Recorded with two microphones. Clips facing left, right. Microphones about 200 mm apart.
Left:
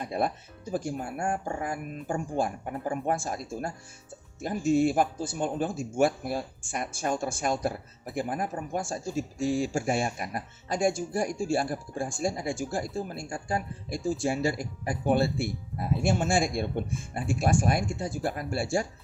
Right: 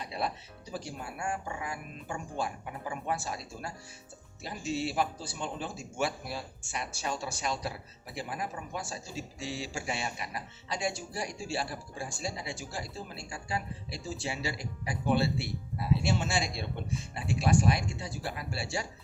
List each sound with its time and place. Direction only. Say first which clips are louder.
0.0 s speech: left 6 dB; 50° left (ahead or behind)